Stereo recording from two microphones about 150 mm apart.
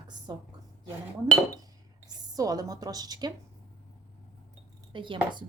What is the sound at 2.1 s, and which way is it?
A woman's voice, 25° right (ahead or behind).